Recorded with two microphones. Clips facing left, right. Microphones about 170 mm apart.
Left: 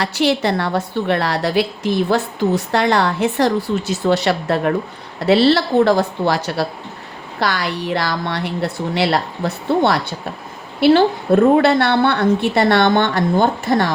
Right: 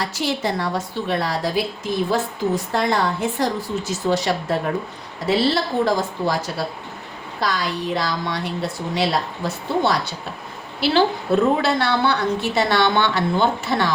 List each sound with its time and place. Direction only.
0.0 s a woman's voice: 70° left (ahead or behind); by 13.9 s 50° left (ahead or behind)